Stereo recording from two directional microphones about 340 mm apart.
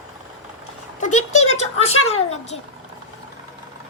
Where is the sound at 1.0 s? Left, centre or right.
Left.